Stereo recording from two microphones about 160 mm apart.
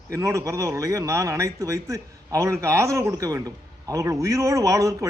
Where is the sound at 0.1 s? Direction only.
20° right (ahead or behind).